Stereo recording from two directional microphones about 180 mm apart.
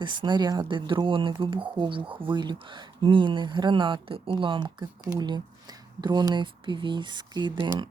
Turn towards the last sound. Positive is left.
turn(degrees=-25)  # may be behind; listen again after turning